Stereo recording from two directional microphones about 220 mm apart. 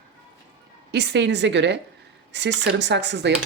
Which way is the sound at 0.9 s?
50° right (ahead or behind).